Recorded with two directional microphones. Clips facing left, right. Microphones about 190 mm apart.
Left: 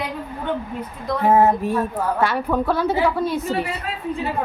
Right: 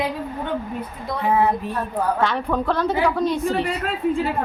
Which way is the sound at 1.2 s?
45° left (ahead or behind).